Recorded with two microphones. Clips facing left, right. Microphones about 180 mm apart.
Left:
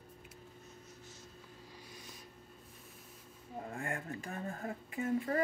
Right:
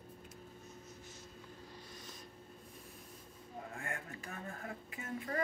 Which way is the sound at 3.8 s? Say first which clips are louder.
Left 7 dB; 30° left (ahead or behind).